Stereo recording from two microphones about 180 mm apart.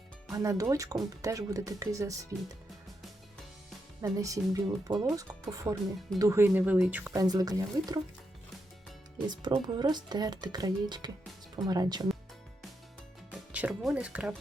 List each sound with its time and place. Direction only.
0.3 s speech: 20° right (ahead or behind)
4.0 s speech: 20° right (ahead or behind)
9.2 s speech: 25° right (ahead or behind)
13.5 s speech: 5° right (ahead or behind)